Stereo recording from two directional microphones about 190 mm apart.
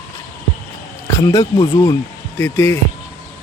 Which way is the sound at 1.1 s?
20° left (ahead or behind).